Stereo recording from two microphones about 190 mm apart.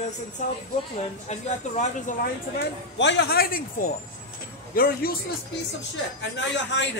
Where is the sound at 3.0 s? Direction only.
70° left (ahead or behind); by 5.1 s 50° left (ahead or behind).